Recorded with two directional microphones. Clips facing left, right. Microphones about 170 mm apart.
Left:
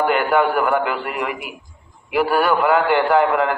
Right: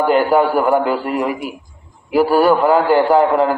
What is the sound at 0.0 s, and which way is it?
A man's voice, 35° right (ahead or behind).